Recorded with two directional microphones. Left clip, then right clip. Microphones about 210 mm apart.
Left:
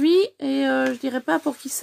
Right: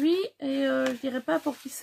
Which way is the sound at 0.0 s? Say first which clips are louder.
Left 8 dB; 50° left (ahead or behind).